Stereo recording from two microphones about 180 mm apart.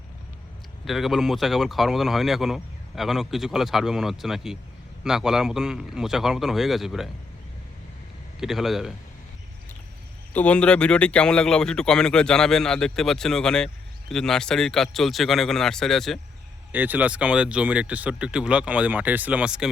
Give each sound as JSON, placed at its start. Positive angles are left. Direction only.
{"t": 0.9, "sound": "speech", "side_deg": 0}
{"t": 8.4, "sound": "speech", "side_deg": 0}
{"t": 10.3, "sound": "speech", "side_deg": 5}
{"t": 16.7, "sound": "speech", "side_deg": -10}